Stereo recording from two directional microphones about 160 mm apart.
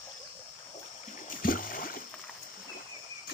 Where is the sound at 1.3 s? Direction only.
60° left (ahead or behind).